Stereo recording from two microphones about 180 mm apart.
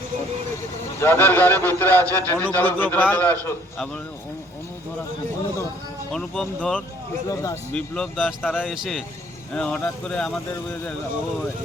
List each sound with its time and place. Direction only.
1.0 s a man's voice: 10° left (ahead or behind)
6.1 s speech: 5° left (ahead or behind)
7.3 s a man's voice: 15° left (ahead or behind)